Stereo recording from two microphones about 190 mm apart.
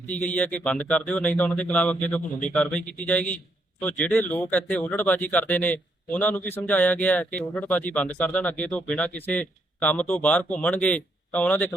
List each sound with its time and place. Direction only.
0.1 s speech: 10° left (ahead or behind)